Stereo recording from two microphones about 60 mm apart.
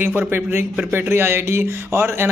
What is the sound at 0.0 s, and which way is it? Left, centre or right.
Speech, right.